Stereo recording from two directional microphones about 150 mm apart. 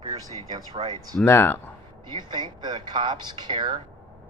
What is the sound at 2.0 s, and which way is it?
Speech, 30° right (ahead or behind).